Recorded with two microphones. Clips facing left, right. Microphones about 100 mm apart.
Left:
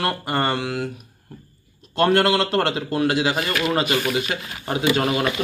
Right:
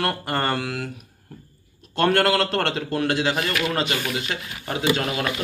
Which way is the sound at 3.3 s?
25° left (ahead or behind).